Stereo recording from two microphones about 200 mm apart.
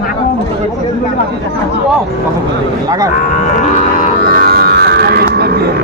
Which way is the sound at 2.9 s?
20° right (ahead or behind).